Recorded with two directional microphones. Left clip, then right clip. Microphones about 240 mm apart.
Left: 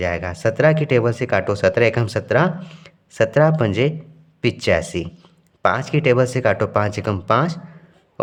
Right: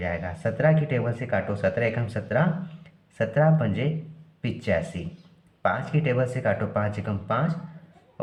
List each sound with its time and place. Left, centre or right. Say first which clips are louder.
0.0 s speech: left 8 dB; left